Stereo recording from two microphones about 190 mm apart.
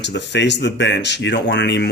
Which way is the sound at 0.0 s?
65° left (ahead or behind).